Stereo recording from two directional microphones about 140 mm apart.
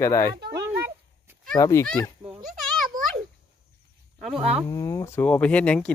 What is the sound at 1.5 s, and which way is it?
Speech, 20° left (ahead or behind).